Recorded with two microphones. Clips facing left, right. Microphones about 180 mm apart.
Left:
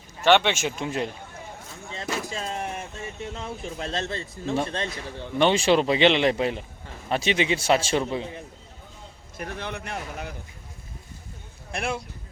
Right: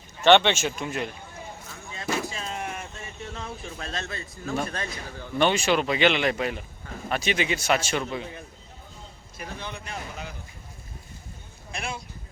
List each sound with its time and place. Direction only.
0.2 s speech: 10° left (ahead or behind)
0.8 s a man's voice: 30° left (ahead or behind)
1.9 s a sound: 30° left (ahead or behind)
3.3 s a man's voice: 25° left (ahead or behind)
9.4 s a man's voice: 65° left (ahead or behind)
11.7 s speech: 60° left (ahead or behind)